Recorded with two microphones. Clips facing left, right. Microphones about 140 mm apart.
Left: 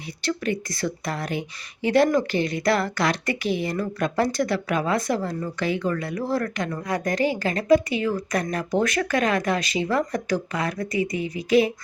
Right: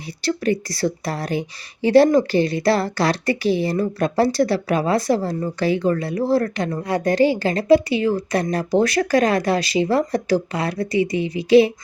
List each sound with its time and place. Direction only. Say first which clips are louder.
0.2 s speech: right 5 dB; 35° right (ahead or behind)